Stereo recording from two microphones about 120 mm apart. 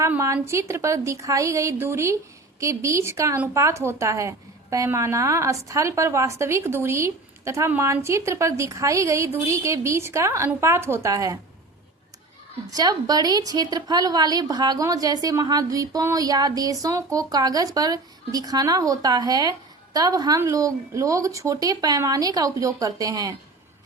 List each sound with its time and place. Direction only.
0.4 s a woman's voice: 25° right (ahead or behind)
12.7 s a woman's voice: 30° right (ahead or behind)